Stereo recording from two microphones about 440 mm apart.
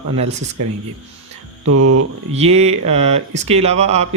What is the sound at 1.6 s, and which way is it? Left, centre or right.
Mantra, right.